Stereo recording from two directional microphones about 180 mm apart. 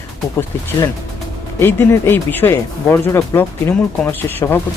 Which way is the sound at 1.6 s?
15° left (ahead or behind).